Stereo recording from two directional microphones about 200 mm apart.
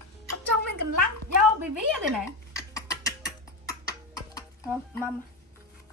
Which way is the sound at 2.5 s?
15° left (ahead or behind).